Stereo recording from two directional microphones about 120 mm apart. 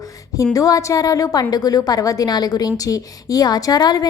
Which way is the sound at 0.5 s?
30° left (ahead or behind).